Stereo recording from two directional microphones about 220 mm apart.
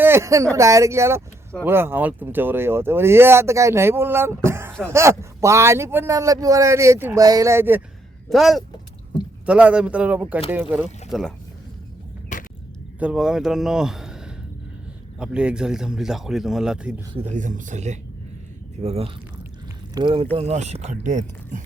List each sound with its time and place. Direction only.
0.0 s speech: 10° right (ahead or behind)
8.3 s speech: centre (ahead or behind)
12.3 s a sound: 35° left (ahead or behind)
13.0 s speech: 5° right (ahead or behind)
17.2 s speech: 35° right (ahead or behind)
20.3 s speech: 30° right (ahead or behind)